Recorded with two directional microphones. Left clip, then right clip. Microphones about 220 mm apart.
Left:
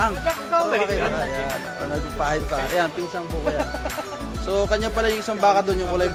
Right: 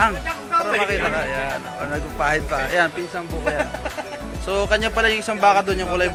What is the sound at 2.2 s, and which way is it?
Speech, 5° right (ahead or behind).